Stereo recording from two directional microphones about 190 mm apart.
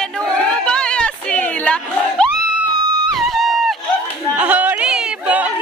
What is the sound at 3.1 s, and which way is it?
Music, centre (ahead or behind).